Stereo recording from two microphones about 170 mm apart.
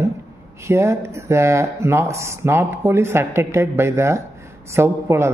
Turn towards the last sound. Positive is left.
turn(degrees=-15)  # may be behind; listen again after turning